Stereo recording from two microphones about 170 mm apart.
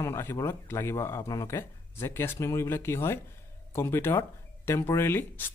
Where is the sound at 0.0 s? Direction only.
15° left (ahead or behind).